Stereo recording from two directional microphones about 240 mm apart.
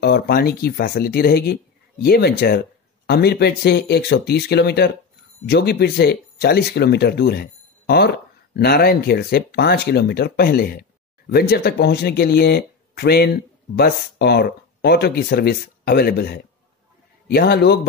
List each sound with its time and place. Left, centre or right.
0.0 s speech: left